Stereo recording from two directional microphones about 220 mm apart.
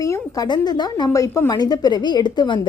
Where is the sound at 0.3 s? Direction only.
20° left (ahead or behind).